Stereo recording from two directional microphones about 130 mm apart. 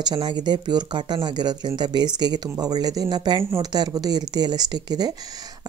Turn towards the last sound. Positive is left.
turn(degrees=-30)  # may be behind; listen again after turning